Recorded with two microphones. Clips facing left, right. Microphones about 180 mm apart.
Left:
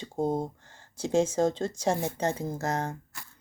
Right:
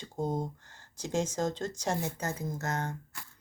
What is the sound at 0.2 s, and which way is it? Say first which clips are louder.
Speech: left 4 dB; 30° left (ahead or behind).